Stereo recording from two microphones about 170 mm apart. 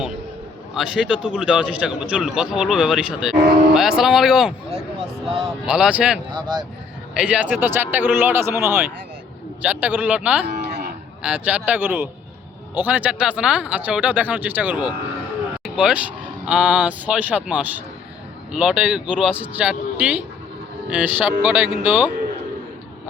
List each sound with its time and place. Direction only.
0.8 s a man's voice: 5° right (ahead or behind)
6.3 s speech: 25° right (ahead or behind)
7.2 s speech: 5° right (ahead or behind)